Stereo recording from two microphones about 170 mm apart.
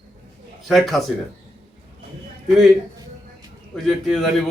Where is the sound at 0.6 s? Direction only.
Centre (ahead or behind).